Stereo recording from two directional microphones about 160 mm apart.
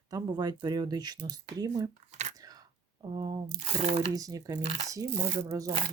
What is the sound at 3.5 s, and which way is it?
Speech, 40° right (ahead or behind).